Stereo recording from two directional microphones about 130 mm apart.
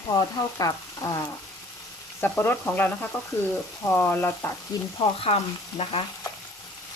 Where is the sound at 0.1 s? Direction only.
30° left (ahead or behind).